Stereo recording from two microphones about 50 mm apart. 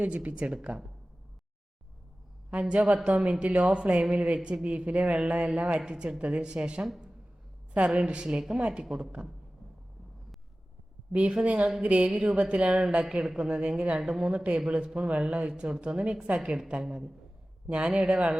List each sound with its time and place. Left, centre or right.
0.0 s a woman's voice: right
2.5 s a woman's voice: right
8.5 s a woman's voice: right
8.8 s speech: centre
11.1 s a woman's voice: right